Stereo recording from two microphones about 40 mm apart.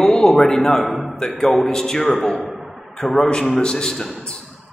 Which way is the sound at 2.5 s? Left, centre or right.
Centre.